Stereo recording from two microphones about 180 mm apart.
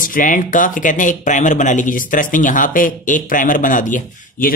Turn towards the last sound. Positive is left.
turn(degrees=45)  # may be behind; listen again after turning